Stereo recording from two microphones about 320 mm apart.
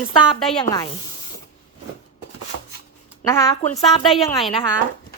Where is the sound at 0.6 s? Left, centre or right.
Centre.